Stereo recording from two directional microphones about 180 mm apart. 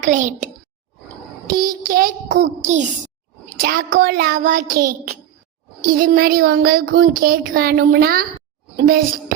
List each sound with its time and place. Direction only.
0.0 s a child's voice: 45° right (ahead or behind)
1.5 s a child's voice: 50° right (ahead or behind)
3.6 s a child's voice: 55° right (ahead or behind)
6.0 s a sound: 55° right (ahead or behind)
7.1 s a child's voice: 50° right (ahead or behind)